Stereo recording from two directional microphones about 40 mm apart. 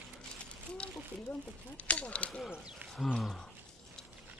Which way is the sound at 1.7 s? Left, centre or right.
Left.